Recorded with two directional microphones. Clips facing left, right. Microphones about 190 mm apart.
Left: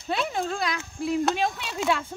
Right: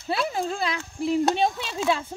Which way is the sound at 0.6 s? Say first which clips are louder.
Right 2 dB; 30° right (ahead or behind).